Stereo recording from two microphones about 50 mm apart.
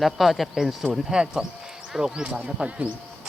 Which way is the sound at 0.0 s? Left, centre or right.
Centre.